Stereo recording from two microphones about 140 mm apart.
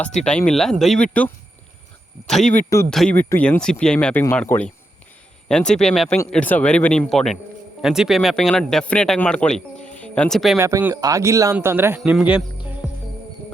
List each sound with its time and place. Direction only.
0.3 s speech: 5° left (ahead or behind)
2.4 s speech: 65° left (ahead or behind)
2.9 s speech: 5° left (ahead or behind)
3.2 s speech: 15° left (ahead or behind)
10.6 s a man's voice: 15° right (ahead or behind)
12.8 s music: 5° right (ahead or behind)